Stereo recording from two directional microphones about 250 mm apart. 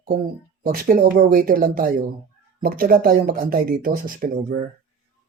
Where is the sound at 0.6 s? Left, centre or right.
Right.